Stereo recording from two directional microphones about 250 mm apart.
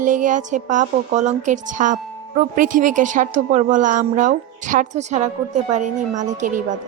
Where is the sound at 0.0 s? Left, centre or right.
Right.